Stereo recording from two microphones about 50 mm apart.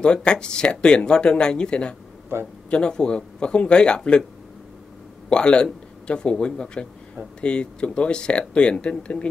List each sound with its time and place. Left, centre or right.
0.0 s speech: centre
5.3 s a man's voice: centre